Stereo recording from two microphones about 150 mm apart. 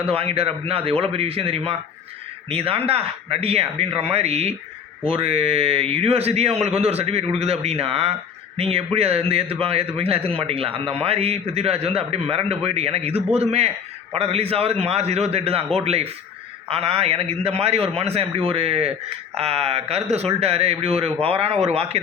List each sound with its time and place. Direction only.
0.0 s a man's voice: 40° right (ahead or behind)